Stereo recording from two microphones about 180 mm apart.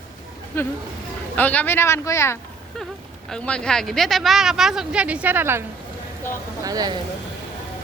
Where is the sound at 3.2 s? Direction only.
5° left (ahead or behind); by 6.9 s 20° right (ahead or behind).